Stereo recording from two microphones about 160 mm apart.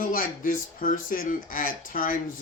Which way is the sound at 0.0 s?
60° left (ahead or behind).